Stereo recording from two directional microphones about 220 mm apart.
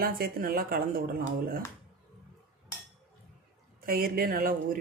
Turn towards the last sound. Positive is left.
turn(degrees=-40)  # may be behind; listen again after turning